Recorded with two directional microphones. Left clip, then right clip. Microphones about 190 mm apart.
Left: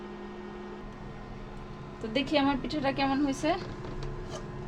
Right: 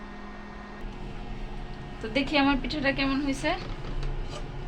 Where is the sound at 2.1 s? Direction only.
25° left (ahead or behind).